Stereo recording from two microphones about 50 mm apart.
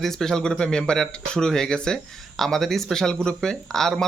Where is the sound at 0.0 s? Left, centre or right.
Centre.